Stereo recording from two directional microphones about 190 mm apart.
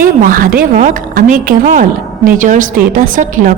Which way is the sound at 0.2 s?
50° right (ahead or behind).